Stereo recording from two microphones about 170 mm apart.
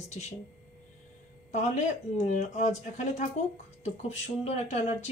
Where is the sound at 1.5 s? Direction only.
40° left (ahead or behind).